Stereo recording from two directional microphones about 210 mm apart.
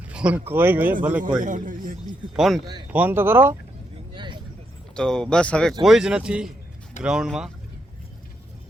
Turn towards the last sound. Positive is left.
turn(degrees=-5)  # may be behind; listen again after turning